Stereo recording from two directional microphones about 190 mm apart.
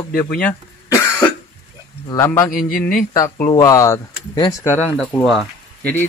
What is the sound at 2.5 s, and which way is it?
Speech, 45° left (ahead or behind).